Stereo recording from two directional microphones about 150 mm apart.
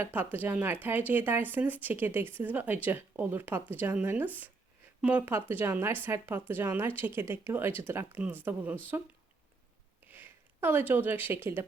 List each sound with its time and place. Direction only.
0.0 s speech: 10° right (ahead or behind)
10.1 s speech: 15° right (ahead or behind)